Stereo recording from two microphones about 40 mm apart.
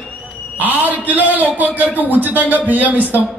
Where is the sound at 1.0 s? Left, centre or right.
Right.